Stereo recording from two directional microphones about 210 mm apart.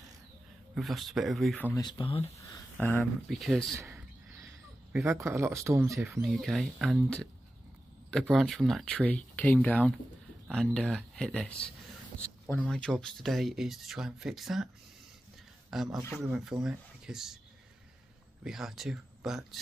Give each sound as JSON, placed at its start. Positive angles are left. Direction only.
{"t": 0.7, "sound": "speech", "side_deg": 0}
{"t": 1.7, "sound": "speech", "side_deg": 20}
{"t": 2.2, "sound": "speech", "side_deg": 10}
{"t": 3.7, "sound": "a sound", "side_deg": -15}
{"t": 5.0, "sound": "speech", "side_deg": -15}
{"t": 6.2, "sound": "speech", "side_deg": 0}
{"t": 15.7, "sound": "speech", "side_deg": 0}
{"t": 18.4, "sound": "speech", "side_deg": 0}